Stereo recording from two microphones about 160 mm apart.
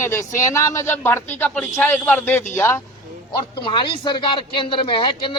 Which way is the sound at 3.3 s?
30° left (ahead or behind).